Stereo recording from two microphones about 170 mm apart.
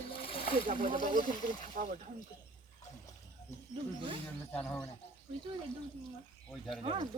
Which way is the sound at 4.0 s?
30° right (ahead or behind).